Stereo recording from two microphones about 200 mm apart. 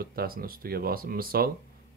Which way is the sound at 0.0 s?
50° right (ahead or behind).